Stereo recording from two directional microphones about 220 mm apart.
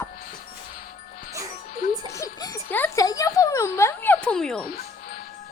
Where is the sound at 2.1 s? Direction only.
15° left (ahead or behind).